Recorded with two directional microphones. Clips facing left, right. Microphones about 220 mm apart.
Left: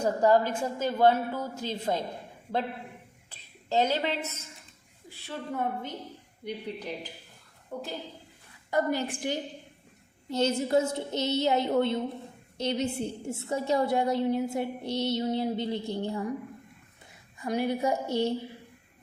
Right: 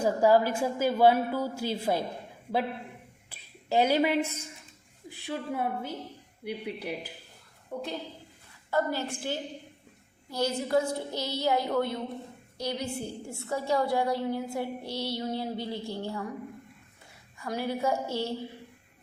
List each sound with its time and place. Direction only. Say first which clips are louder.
0.0 s a woman's voice: right 1 dB; 10° right (ahead or behind)
3.2 s a woman's voice: right 2 dB; 10° right (ahead or behind)
7.7 s a woman's voice: right 1 dB; centre (ahead or behind)
8.7 s a woman's voice: left 1 dB; 15° left (ahead or behind)
17.3 s a woman's voice: left 3 dB; 20° left (ahead or behind)